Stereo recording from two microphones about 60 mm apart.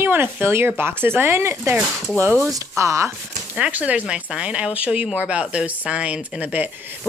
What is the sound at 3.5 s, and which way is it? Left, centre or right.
Speech, right.